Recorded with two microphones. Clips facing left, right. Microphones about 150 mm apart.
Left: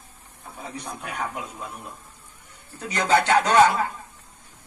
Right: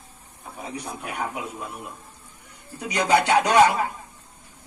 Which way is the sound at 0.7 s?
5° right (ahead or behind).